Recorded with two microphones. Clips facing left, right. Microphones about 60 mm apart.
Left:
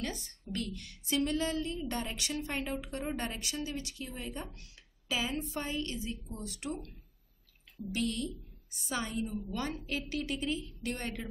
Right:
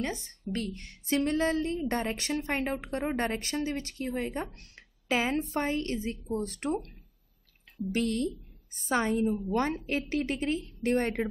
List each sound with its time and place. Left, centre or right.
0.0 s a woman's voice: right
7.9 s a woman's voice: right